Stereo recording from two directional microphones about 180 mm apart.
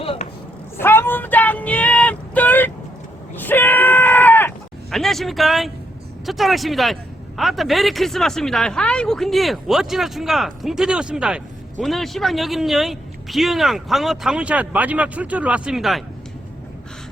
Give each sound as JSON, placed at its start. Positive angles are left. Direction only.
{"t": 0.0, "sound": "chopping", "side_deg": 30}
{"t": 0.8, "sound": "a sound", "side_deg": 10}
{"t": 3.3, "sound": "screaming", "side_deg": 10}
{"t": 4.9, "sound": "a man's voice", "side_deg": 0}